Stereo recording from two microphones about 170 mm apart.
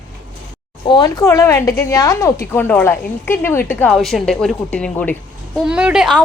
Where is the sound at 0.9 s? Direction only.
25° left (ahead or behind).